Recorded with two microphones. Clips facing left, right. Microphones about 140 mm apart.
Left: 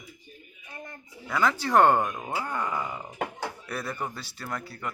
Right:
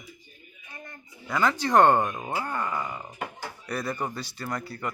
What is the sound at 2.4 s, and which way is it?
Speech, 5° left (ahead or behind).